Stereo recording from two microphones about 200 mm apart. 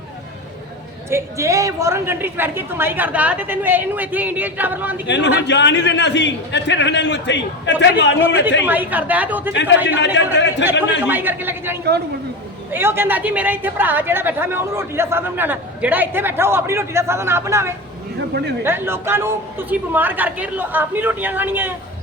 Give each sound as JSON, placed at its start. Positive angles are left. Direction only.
{"t": 1.1, "sound": "a woman's voice", "side_deg": -15}
{"t": 5.0, "sound": "a man's voice", "side_deg": 60}
{"t": 8.6, "sound": "a woman's voice", "side_deg": -10}
{"t": 9.5, "sound": "a man's voice", "side_deg": 65}
{"t": 11.0, "sound": "a woman's voice", "side_deg": -10}